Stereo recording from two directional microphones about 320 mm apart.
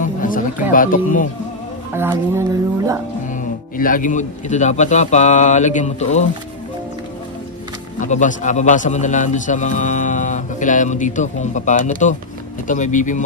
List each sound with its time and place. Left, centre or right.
0.0 s music: left
2.0 s speech: centre
3.3 s a man's voice: left
8.0 s a man's voice: left